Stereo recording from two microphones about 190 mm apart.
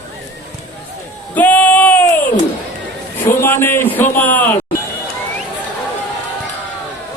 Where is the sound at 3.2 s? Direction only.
10° left (ahead or behind).